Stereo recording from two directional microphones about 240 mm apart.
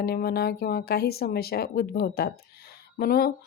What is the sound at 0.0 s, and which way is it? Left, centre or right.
Speech, left.